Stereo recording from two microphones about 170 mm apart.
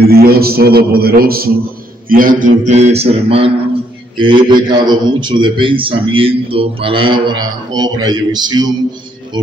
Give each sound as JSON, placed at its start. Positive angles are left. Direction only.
{"t": 0.0, "sound": "a man's voice", "side_deg": -65}